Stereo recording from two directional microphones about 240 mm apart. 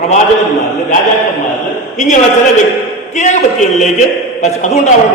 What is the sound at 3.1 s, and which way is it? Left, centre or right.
A man's voice, left.